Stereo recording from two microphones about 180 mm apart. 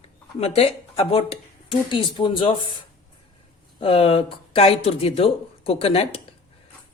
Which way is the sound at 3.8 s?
35° left (ahead or behind).